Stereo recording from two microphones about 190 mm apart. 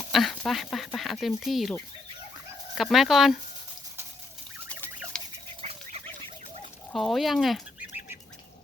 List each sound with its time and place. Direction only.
0.1 s a sound: centre (ahead or behind)
0.9 s speech: centre (ahead or behind)
2.7 s speech: centre (ahead or behind)
6.9 s speech: centre (ahead or behind)